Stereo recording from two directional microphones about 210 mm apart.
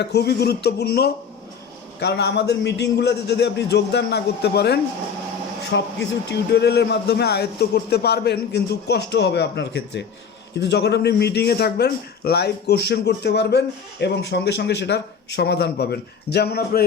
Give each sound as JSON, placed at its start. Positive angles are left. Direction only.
{"t": 0.0, "sound": "speech", "side_deg": 50}